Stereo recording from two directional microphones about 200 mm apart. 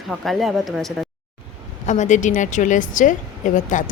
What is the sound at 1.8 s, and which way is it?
Speech, 35° left (ahead or behind).